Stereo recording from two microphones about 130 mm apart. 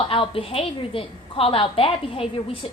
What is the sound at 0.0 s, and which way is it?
A woman's voice, 45° left (ahead or behind).